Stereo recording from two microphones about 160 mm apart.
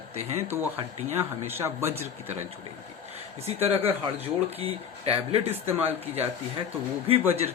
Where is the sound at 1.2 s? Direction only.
15° right (ahead or behind).